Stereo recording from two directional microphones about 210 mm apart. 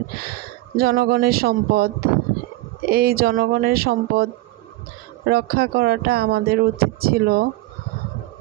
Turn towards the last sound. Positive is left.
turn(degrees=-45)  # may be behind; listen again after turning